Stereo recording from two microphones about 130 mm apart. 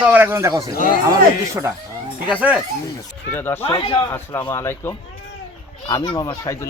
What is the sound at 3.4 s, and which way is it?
Speech, 15° left (ahead or behind).